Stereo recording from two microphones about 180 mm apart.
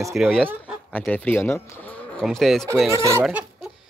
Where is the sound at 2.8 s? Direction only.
15° right (ahead or behind).